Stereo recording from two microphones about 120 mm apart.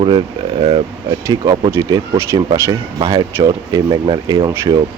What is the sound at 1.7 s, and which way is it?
Speech, 25° right (ahead or behind).